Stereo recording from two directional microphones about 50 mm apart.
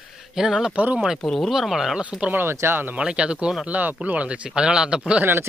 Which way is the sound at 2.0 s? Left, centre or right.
Centre.